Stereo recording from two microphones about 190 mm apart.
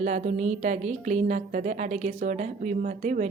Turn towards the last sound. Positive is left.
turn(degrees=-40)  # may be behind; listen again after turning